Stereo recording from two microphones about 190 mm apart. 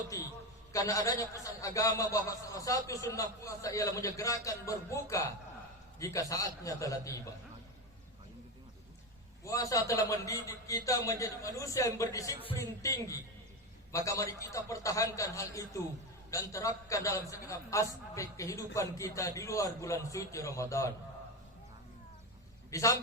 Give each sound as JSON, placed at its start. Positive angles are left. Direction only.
{"t": 0.1, "sound": "a man's voice", "side_deg": 15}
{"t": 9.4, "sound": "a man's voice", "side_deg": 15}
{"t": 22.7, "sound": "a man's voice", "side_deg": 15}